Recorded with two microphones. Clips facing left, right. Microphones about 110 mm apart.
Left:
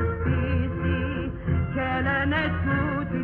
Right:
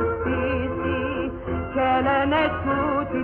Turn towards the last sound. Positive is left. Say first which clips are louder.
# right 4 dB
turn(degrees=-45)  # may be behind; listen again after turning